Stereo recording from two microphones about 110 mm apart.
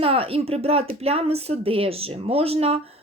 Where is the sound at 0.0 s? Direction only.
60° right (ahead or behind).